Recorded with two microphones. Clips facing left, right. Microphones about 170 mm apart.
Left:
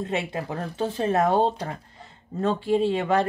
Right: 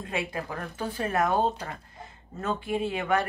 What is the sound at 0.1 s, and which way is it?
Speech, 25° left (ahead or behind).